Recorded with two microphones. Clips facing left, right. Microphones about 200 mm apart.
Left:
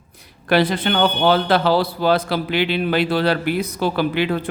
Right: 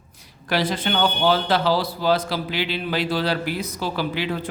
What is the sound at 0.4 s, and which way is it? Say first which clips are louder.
Speech: left 6 dB; 60° left (ahead or behind).